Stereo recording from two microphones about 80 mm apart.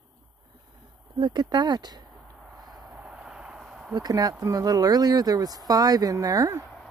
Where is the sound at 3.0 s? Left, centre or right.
Centre.